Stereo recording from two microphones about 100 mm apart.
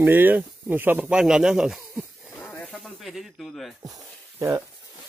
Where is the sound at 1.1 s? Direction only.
5° right (ahead or behind).